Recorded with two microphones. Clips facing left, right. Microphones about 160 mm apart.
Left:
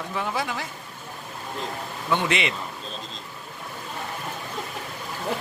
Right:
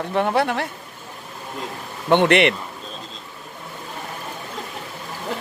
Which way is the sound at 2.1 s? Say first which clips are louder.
Right 9 dB; 65° right (ahead or behind).